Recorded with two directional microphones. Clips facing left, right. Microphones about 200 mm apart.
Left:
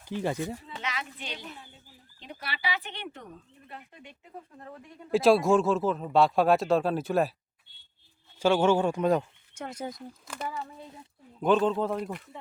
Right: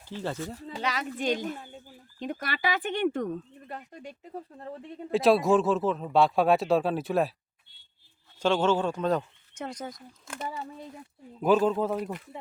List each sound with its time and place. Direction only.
0.0 s speech: 15° left (ahead or behind)
0.8 s speech: 40° right (ahead or behind)
5.1 s speech: centre (ahead or behind)
8.4 s speech: 10° left (ahead or behind)
11.3 s speech: 5° right (ahead or behind)